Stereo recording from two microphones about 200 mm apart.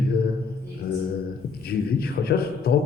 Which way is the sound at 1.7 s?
50° left (ahead or behind).